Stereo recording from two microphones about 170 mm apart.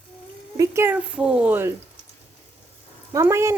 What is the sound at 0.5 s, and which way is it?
Speech, 20° right (ahead or behind).